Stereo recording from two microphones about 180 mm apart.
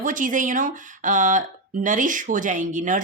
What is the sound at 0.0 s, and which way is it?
Speech, 50° right (ahead or behind).